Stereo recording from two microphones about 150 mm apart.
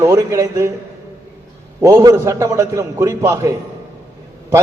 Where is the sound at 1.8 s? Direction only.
20° right (ahead or behind).